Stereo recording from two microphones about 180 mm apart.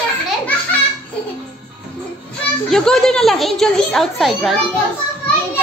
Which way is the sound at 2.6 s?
5° left (ahead or behind).